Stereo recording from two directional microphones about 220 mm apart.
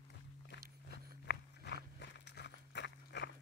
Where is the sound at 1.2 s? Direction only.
50° left (ahead or behind).